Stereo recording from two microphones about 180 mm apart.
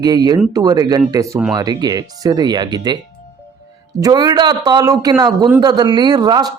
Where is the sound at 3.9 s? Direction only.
20° right (ahead or behind).